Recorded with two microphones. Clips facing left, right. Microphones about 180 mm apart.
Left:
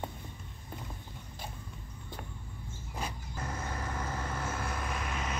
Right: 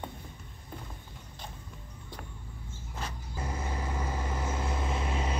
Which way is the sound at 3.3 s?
15° right (ahead or behind).